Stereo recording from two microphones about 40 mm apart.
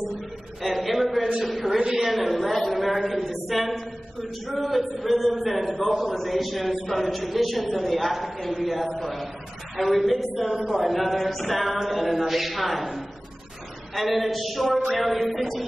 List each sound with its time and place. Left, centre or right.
0.6 s a sound: centre
1.8 s a woman's voice: centre
2.0 s a man's voice: centre
11.7 s a capella: centre
12.0 s a man's voice: centre